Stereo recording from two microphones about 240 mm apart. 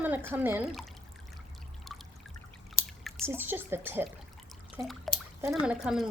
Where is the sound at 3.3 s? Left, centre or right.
Centre.